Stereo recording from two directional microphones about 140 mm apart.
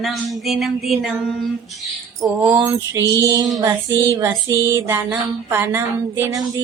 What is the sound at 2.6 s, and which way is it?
Music, 20° right (ahead or behind).